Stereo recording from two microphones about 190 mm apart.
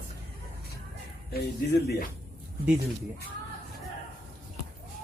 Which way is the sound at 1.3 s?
60° left (ahead or behind).